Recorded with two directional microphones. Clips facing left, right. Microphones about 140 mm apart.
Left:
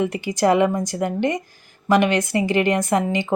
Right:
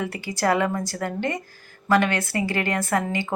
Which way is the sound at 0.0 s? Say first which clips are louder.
Left 5 dB; 20° left (ahead or behind).